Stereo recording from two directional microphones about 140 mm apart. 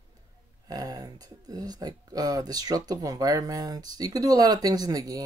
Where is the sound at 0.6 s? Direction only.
25° right (ahead or behind).